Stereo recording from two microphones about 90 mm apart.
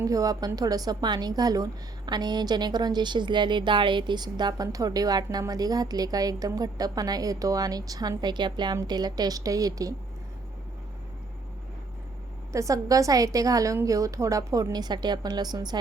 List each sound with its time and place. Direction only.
0.0 s a woman's voice: 40° right (ahead or behind)
8.2 s a woman's voice: 55° right (ahead or behind)
12.5 s a woman's voice: 35° right (ahead or behind)